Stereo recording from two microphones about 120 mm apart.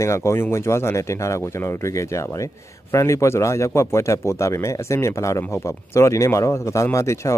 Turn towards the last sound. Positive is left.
turn(degrees=25)  # may be behind; listen again after turning